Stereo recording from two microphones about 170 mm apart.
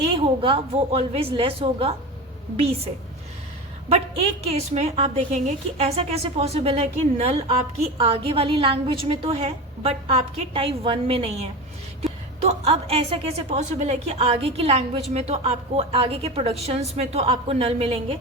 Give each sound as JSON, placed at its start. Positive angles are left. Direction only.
{"t": 0.1, "sound": "a woman's voice", "side_deg": -30}
{"t": 4.4, "sound": "a woman's voice", "side_deg": -40}
{"t": 12.5, "sound": "a woman's voice", "side_deg": -35}